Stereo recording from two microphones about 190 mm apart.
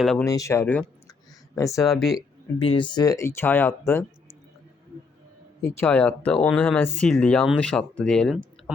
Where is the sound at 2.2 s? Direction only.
25° left (ahead or behind).